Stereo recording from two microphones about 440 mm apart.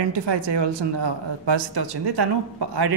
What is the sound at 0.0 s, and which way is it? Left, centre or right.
Speech, right.